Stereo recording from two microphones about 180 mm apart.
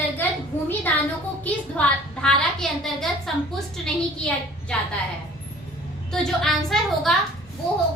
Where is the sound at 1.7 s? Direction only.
5° left (ahead or behind).